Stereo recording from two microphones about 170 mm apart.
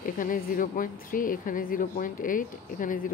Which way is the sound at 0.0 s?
55° left (ahead or behind).